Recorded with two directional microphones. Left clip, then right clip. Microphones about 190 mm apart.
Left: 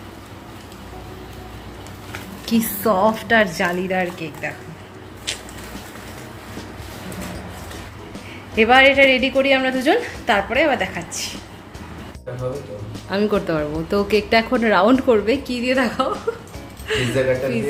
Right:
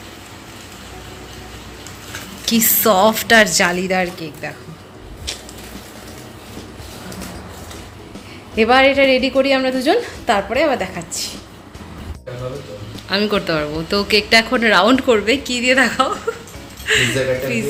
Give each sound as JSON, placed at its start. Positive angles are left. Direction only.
{"t": 2.4, "sound": "speech", "side_deg": 0}
{"t": 3.0, "sound": "speech", "side_deg": -10}
{"t": 8.5, "sound": "a woman's voice", "side_deg": -20}
{"t": 13.1, "sound": "a woman's voice", "side_deg": 5}